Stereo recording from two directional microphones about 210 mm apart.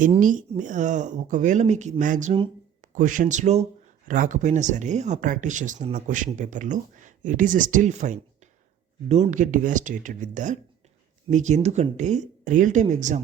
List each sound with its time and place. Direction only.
0.0 s speech: 40° right (ahead or behind)